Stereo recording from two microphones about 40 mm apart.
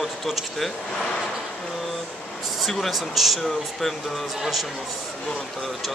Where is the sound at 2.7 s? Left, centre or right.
Centre.